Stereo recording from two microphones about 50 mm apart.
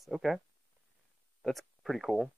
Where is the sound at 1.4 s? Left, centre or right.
Centre.